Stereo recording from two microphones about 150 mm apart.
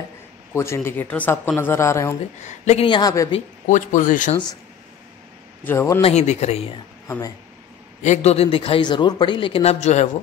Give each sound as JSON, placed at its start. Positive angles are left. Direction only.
{"t": 0.5, "sound": "speech", "side_deg": 15}
{"t": 2.4, "sound": "speech", "side_deg": 50}
{"t": 2.9, "sound": "a woman's voice", "side_deg": 25}
{"t": 3.6, "sound": "speech", "side_deg": 60}
{"t": 5.6, "sound": "speech", "side_deg": 15}
{"t": 5.9, "sound": "speech", "side_deg": 45}
{"t": 7.1, "sound": "a woman's voice", "side_deg": 25}
{"t": 8.0, "sound": "speech", "side_deg": 50}